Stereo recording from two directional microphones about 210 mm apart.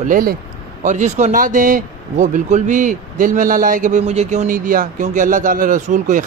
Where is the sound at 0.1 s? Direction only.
45° right (ahead or behind).